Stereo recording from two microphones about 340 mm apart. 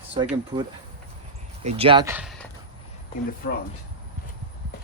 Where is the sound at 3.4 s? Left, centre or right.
Left.